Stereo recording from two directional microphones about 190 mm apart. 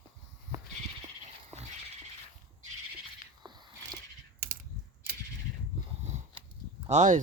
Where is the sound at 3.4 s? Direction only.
20° right (ahead or behind).